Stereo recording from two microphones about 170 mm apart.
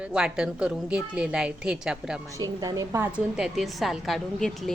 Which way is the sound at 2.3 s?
20° right (ahead or behind).